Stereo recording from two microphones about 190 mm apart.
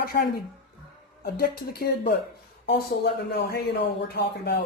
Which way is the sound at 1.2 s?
50° left (ahead or behind).